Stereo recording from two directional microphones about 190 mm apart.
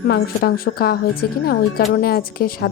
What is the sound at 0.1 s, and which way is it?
A woman's voice, 50° left (ahead or behind).